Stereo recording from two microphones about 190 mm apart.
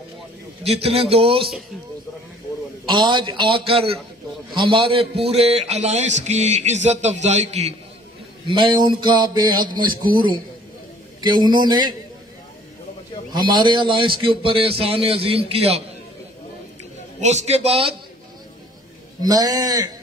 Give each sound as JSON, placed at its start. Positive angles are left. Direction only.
{"t": 0.8, "sound": "a man's voice", "side_deg": -30}
{"t": 2.9, "sound": "a man's voice", "side_deg": -25}
{"t": 4.6, "sound": "a man's voice", "side_deg": -30}
{"t": 8.5, "sound": "a man's voice", "side_deg": -25}
{"t": 11.1, "sound": "a man's voice", "side_deg": -25}
{"t": 13.3, "sound": "a man's voice", "side_deg": -25}
{"t": 17.2, "sound": "a man's voice", "side_deg": -35}
{"t": 19.2, "sound": "a man's voice", "side_deg": -20}